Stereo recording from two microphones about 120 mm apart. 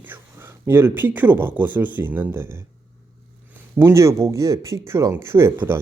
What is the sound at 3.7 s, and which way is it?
Speech, 20° right (ahead or behind).